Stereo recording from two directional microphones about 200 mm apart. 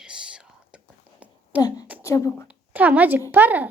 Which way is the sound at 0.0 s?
5° right (ahead or behind).